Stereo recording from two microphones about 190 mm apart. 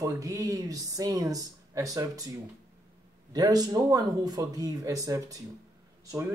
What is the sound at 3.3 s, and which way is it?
A man's voice, 20° right (ahead or behind).